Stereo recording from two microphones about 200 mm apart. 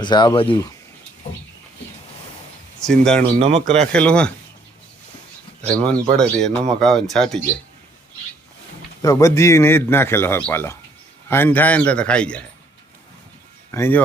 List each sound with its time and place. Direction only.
0.0 s speech: 20° left (ahead or behind)
2.8 s speech: 5° left (ahead or behind)
5.6 s speech: 5° left (ahead or behind)
9.0 s a man's voice: 15° left (ahead or behind)
13.7 s speech: 10° left (ahead or behind)